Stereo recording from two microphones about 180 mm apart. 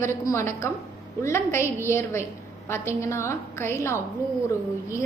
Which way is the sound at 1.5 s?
15° left (ahead or behind).